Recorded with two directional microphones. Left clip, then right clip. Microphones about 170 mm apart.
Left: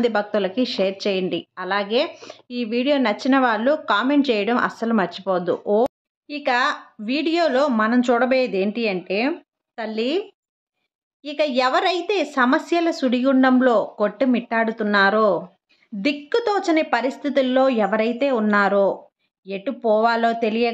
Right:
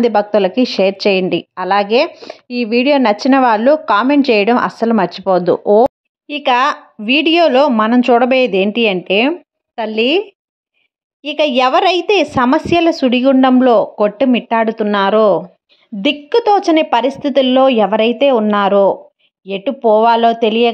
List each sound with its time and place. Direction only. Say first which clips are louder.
0.0 s a woman's voice: right 9 dB; 40° right (ahead or behind)
11.2 s a woman's voice: right 7 dB; 35° right (ahead or behind)